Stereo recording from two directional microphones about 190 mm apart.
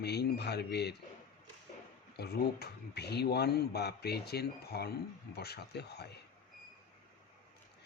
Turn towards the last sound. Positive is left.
turn(degrees=60)  # may be behind; listen again after turning